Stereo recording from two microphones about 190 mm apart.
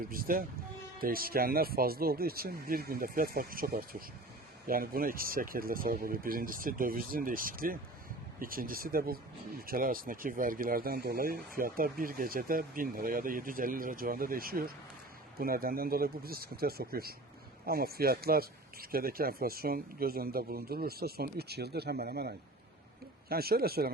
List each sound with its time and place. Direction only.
0.1 s speech: 50° right (ahead or behind)